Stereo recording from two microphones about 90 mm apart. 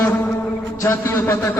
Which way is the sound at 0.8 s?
25° left (ahead or behind).